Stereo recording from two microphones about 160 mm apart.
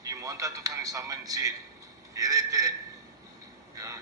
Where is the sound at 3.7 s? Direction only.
20° right (ahead or behind).